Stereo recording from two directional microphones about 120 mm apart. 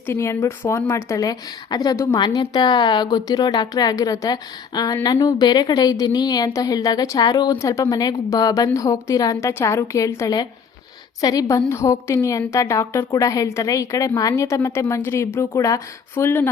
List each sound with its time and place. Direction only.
0.0 s a woman's voice: 20° left (ahead or behind)